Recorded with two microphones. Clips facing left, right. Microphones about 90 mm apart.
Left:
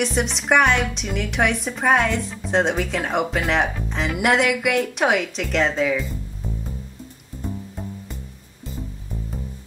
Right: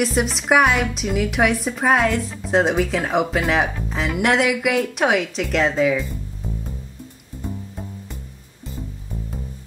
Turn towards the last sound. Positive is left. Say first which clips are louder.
# even
turn(degrees=0)  # may be behind; listen again after turning